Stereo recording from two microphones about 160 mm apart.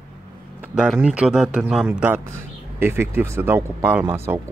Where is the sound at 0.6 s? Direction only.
5° right (ahead or behind).